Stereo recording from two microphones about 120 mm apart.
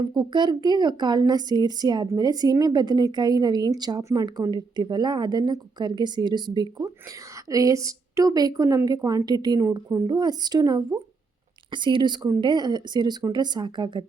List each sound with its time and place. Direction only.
0.0 s a woman's voice: 35° right (ahead or behind)